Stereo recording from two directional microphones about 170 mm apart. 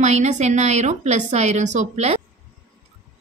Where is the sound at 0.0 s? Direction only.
40° right (ahead or behind).